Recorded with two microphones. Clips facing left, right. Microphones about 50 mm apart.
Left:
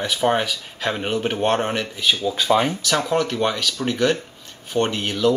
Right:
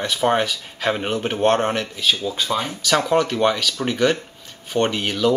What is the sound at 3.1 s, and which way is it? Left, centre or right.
Speech, centre.